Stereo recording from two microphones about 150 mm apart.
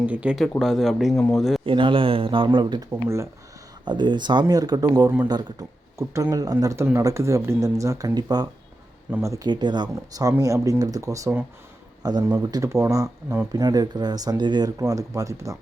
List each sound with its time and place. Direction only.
0.0 s speech: 10° right (ahead or behind)
1.6 s speech: 35° right (ahead or behind)
2.9 s speech: 20° right (ahead or behind)
3.8 s speech: 30° right (ahead or behind)
9.0 s speech: 15° right (ahead or behind)